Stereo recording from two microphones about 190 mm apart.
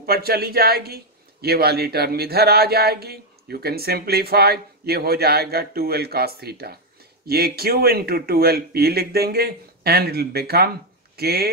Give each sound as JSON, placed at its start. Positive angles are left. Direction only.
{"t": 0.0, "sound": "speech", "side_deg": -55}